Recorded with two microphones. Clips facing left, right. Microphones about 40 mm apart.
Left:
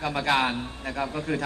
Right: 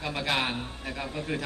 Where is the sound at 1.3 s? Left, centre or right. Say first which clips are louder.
Left 3 dB; centre.